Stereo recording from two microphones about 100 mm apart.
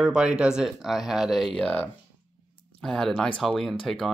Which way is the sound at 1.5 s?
15° left (ahead or behind).